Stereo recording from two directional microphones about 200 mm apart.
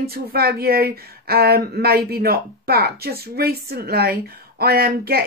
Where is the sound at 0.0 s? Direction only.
50° right (ahead or behind).